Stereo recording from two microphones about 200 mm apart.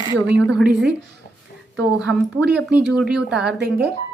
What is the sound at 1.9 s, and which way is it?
A woman's voice, 5° right (ahead or behind).